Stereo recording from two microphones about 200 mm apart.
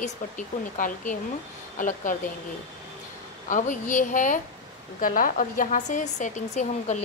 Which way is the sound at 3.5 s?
40° left (ahead or behind).